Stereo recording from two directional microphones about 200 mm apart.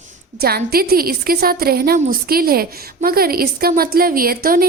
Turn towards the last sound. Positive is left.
turn(degrees=-45)  # may be behind; listen again after turning